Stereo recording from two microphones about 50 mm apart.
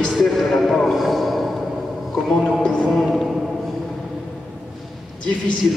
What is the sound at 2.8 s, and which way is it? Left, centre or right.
Speech, centre.